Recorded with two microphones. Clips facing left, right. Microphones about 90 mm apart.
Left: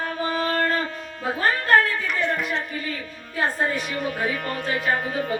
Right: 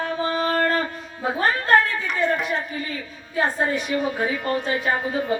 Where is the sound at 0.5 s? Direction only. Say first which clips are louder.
Right 2 dB; 10° right (ahead or behind).